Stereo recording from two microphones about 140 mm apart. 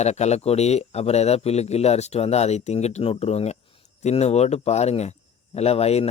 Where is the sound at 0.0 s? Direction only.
50° left (ahead or behind).